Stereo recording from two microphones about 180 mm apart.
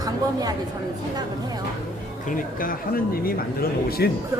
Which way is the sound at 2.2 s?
50° left (ahead or behind).